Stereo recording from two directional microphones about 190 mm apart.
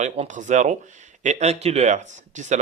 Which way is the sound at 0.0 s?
40° right (ahead or behind).